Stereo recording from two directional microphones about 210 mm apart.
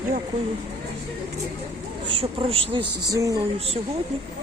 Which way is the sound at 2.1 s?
25° right (ahead or behind).